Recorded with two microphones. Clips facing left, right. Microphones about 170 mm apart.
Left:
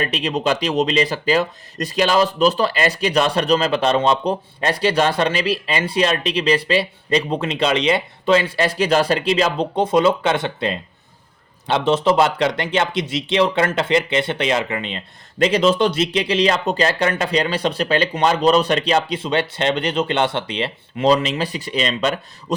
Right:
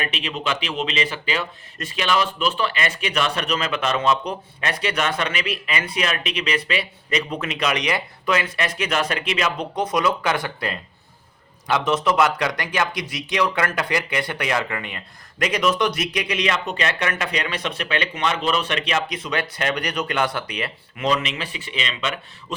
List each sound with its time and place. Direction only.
0.0 s speech: 40° left (ahead or behind)